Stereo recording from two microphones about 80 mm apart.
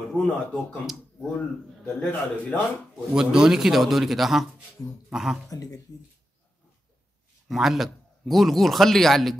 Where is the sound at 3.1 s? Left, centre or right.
Centre.